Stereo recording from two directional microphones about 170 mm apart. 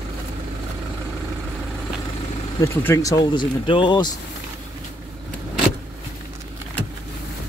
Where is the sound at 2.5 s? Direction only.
20° left (ahead or behind).